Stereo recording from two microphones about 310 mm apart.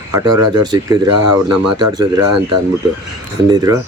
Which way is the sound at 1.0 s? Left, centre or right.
Right.